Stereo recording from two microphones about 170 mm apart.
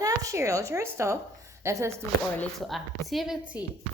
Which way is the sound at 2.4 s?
Centre (ahead or behind).